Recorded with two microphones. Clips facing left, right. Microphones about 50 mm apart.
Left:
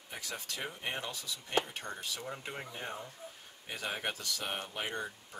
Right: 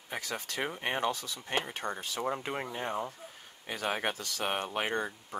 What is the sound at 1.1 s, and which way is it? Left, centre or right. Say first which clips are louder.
Speech: even; right.